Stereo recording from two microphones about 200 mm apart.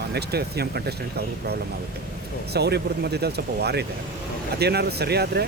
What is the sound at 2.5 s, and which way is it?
Speech, 55° right (ahead or behind).